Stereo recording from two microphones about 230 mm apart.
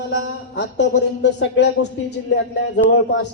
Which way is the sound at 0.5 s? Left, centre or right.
Left.